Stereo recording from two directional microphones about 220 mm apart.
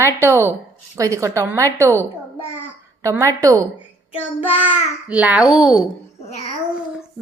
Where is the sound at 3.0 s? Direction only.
15° right (ahead or behind).